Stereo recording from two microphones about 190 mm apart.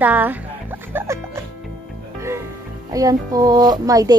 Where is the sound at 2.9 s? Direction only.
20° right (ahead or behind).